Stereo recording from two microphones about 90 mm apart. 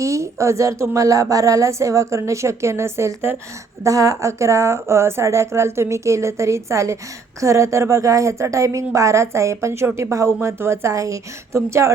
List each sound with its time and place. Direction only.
0.0 s speech: 35° right (ahead or behind)